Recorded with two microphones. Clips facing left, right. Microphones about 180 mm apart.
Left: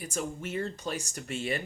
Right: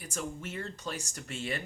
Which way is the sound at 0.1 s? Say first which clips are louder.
Left 3 dB; 20° left (ahead or behind).